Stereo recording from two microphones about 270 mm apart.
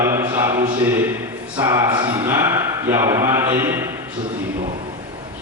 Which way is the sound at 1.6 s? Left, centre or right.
Centre.